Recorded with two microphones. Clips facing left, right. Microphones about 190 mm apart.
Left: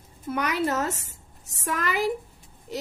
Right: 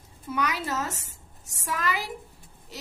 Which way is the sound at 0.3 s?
60° left (ahead or behind).